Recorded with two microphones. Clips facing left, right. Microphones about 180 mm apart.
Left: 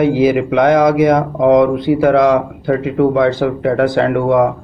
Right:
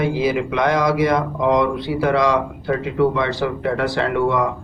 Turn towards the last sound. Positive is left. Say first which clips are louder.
# left 6 dB
turn(degrees=55)  # may be behind; listen again after turning